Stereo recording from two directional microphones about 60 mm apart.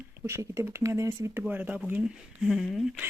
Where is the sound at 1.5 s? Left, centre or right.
Right.